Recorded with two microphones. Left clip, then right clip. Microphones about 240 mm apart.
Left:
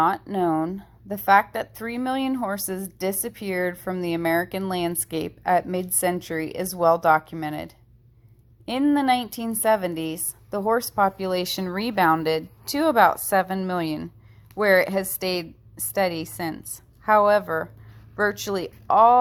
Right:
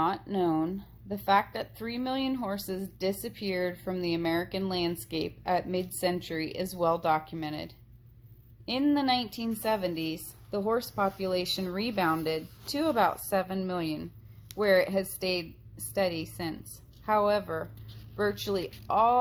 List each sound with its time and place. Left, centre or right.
0.0 s speech: left